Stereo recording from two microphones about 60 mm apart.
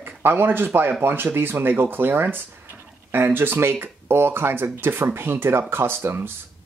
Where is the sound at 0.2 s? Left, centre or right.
Right.